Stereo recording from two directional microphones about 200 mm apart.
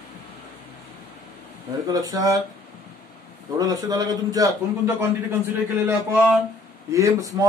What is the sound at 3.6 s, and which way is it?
Speech, 20° right (ahead or behind).